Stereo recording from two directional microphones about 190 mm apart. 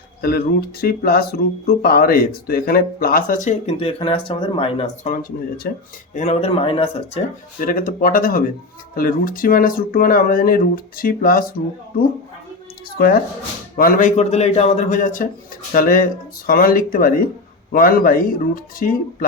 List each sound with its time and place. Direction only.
0.2 s speech: 55° left (ahead or behind); by 5.1 s 30° left (ahead or behind)
5.7 s speech: 55° left (ahead or behind)
6.1 s a man's voice: 35° left (ahead or behind)
7.6 s speech: 45° left (ahead or behind)
13.7 s a man's voice: 45° left (ahead or behind)